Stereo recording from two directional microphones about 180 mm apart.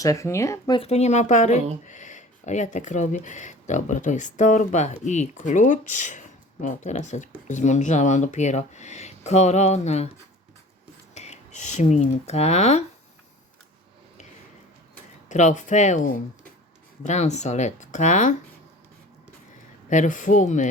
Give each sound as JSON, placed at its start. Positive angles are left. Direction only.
{"t": 0.0, "sound": "speech", "side_deg": 15}
{"t": 0.8, "sound": "speech", "side_deg": 35}
{"t": 11.1, "sound": "speech", "side_deg": 40}
{"t": 15.3, "sound": "speech", "side_deg": 40}
{"t": 19.9, "sound": "speech", "side_deg": 45}